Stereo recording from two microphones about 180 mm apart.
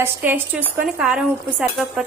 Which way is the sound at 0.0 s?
10° right (ahead or behind).